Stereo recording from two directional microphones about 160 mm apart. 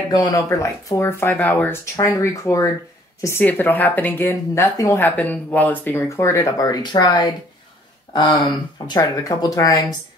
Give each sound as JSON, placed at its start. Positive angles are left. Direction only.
{"t": 0.1, "sound": "speech", "side_deg": 25}